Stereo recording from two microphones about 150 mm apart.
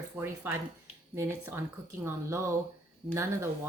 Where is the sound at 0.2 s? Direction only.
15° right (ahead or behind).